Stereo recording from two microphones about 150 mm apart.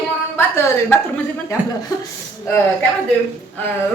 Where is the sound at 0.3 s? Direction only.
15° left (ahead or behind).